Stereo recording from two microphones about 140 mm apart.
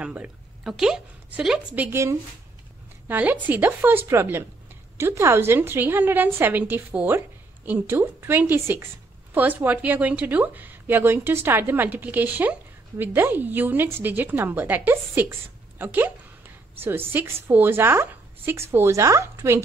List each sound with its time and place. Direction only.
0.0 s a woman's voice: 10° right (ahead or behind)
1.9 s a woman's voice: 20° right (ahead or behind)